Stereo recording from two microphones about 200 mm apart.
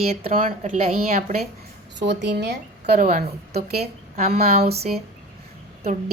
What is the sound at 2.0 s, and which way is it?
A woman's voice, 60° right (ahead or behind).